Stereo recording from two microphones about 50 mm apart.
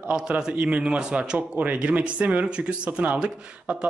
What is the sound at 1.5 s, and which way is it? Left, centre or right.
A man's voice, right.